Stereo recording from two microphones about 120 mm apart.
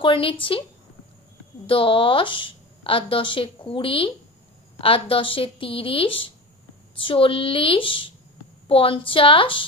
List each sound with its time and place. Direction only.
0.0 s a woman's voice: 45° left (ahead or behind)
1.7 s a woman's voice: 50° left (ahead or behind)